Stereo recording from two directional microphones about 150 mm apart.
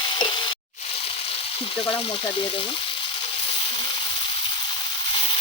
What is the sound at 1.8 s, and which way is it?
Speech, 35° left (ahead or behind).